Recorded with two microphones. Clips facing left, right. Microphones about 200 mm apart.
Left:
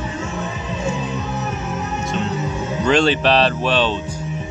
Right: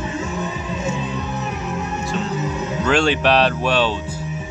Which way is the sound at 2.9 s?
10° right (ahead or behind).